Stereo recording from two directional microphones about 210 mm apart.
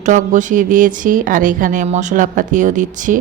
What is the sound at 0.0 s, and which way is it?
Speech, 35° right (ahead or behind).